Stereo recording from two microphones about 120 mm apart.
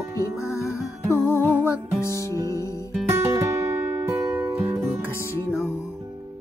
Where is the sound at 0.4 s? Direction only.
25° left (ahead or behind).